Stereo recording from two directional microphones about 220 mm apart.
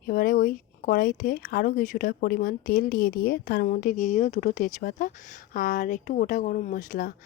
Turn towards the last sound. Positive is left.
turn(degrees=35)  # may be behind; listen again after turning